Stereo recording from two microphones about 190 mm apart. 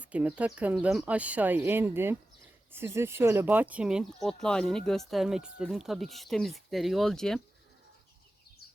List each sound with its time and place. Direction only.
0.0 s speech: 5° right (ahead or behind)